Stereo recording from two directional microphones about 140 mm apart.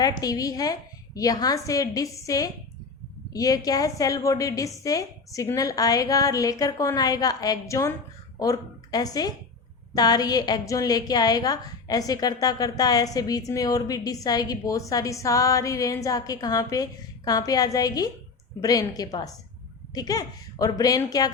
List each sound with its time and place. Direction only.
0.0 s a woman's voice: 25° left (ahead or behind)